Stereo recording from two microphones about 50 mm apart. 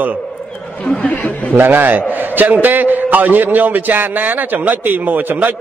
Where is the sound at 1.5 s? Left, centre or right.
Right.